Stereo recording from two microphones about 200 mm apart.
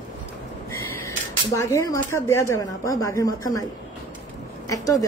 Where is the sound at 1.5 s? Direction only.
15° left (ahead or behind).